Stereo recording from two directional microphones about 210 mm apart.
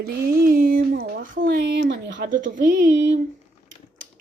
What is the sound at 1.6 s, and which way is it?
Speech, 55° right (ahead or behind).